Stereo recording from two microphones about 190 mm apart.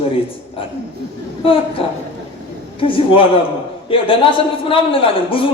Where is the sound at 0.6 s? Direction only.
30° left (ahead or behind).